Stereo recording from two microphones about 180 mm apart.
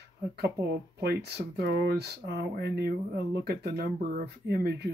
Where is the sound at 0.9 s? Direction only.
60° right (ahead or behind).